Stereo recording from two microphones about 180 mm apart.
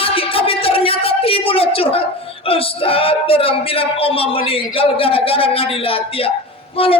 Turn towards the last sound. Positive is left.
turn(degrees=30)  # may be behind; listen again after turning